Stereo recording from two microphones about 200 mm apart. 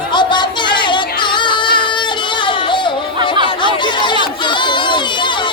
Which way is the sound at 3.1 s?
25° right (ahead or behind).